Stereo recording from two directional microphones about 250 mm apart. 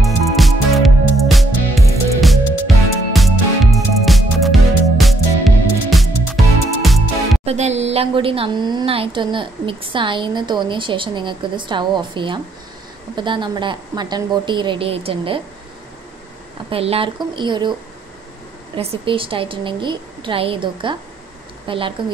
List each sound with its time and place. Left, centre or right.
0.0 s music: centre
7.4 s a woman's voice: right
16.7 s a woman's voice: right
18.8 s a woman's voice: right